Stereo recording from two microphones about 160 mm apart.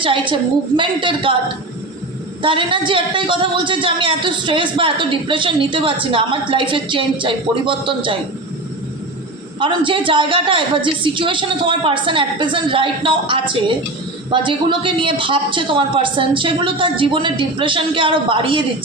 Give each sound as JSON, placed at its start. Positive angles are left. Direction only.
{"t": 0.0, "sound": "a man's voice", "side_deg": -30}
{"t": 2.4, "sound": "a man's voice", "side_deg": -30}
{"t": 9.6, "sound": "a man's voice", "side_deg": -30}